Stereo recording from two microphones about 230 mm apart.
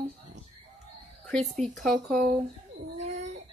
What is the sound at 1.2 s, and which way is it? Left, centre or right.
Speech, centre.